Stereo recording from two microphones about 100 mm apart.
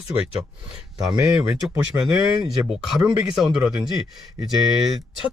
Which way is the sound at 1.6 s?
10° right (ahead or behind).